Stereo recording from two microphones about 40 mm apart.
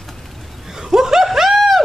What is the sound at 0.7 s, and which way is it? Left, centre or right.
Snicker, centre.